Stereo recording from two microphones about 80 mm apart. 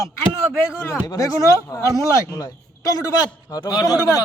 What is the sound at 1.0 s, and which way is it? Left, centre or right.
Speech, left.